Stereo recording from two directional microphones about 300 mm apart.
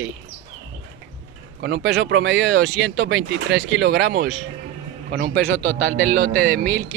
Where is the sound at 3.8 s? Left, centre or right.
Right.